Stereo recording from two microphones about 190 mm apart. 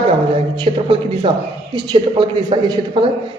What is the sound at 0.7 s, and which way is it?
Speech, 30° right (ahead or behind).